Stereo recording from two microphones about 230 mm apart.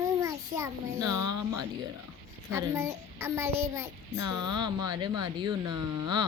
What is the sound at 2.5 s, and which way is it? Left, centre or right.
A child's voice, centre.